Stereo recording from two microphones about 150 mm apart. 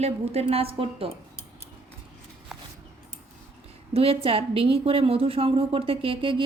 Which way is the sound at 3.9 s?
40° right (ahead or behind).